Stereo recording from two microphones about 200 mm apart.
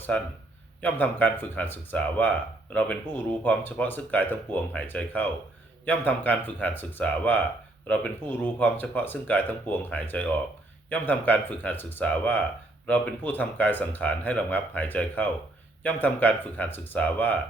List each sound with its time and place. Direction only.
0.1 s speech: 5° left (ahead or behind)
3.4 s speech: 10° left (ahead or behind)